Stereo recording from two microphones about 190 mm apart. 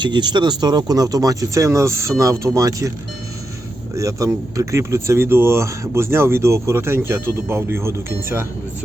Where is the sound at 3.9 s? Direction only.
15° right (ahead or behind).